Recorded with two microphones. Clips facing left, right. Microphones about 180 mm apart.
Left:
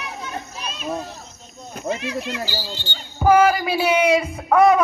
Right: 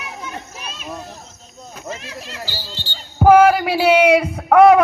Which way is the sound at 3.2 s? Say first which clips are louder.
Right 4 dB; 65° right (ahead or behind).